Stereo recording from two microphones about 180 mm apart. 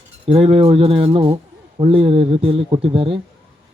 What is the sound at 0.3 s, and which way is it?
A man's voice, 30° right (ahead or behind).